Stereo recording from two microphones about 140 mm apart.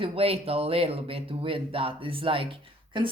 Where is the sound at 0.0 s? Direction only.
45° right (ahead or behind).